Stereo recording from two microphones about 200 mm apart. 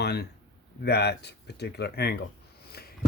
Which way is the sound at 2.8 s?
50° left (ahead or behind).